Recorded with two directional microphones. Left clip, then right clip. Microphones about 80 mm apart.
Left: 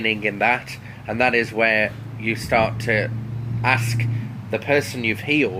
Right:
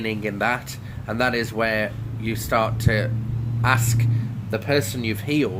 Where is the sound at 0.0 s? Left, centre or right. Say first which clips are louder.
Left 4 dB; right.